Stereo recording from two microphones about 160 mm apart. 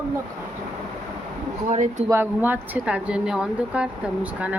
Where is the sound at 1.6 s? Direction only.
50° right (ahead or behind).